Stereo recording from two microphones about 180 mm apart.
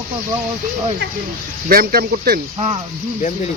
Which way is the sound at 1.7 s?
60° right (ahead or behind).